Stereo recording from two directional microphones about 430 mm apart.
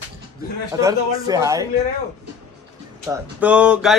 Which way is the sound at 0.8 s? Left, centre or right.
Centre.